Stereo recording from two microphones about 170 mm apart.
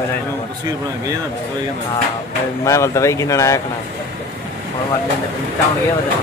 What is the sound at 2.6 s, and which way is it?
Speech, 15° left (ahead or behind).